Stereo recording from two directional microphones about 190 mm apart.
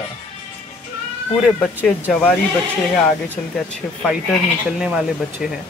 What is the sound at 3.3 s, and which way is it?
Speech, 5° left (ahead or behind).